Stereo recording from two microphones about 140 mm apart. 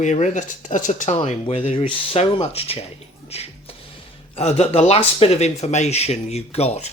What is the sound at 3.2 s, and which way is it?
Music, 45° left (ahead or behind).